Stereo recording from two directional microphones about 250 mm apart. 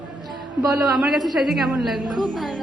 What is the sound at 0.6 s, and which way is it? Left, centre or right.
Speech, centre.